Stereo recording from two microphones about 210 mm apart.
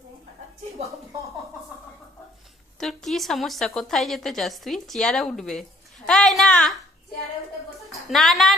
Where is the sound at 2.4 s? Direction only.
Centre (ahead or behind).